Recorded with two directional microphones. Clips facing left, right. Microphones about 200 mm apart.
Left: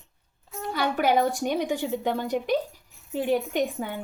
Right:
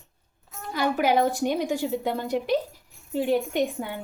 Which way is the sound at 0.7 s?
5° right (ahead or behind).